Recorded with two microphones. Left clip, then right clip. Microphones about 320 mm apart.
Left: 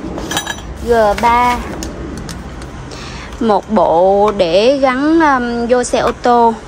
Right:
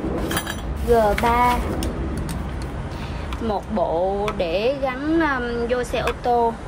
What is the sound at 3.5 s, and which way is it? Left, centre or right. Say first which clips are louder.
Speech: left 11 dB; left.